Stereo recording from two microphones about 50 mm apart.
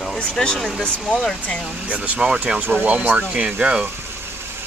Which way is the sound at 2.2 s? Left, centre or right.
Centre.